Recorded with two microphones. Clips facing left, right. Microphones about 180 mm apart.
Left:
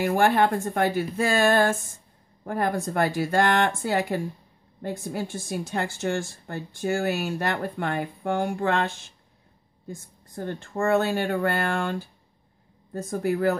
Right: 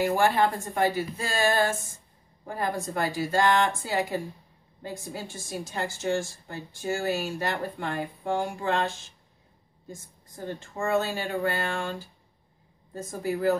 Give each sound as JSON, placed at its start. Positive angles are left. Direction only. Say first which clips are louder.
{"t": 0.0, "sound": "a woman's voice", "louder": "left 2 dB", "side_deg": 55}